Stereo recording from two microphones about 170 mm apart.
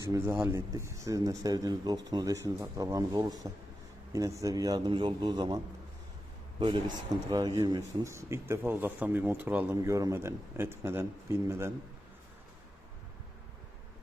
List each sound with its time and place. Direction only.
0.0 s speech: 15° right (ahead or behind)
6.6 s speech: 25° right (ahead or behind)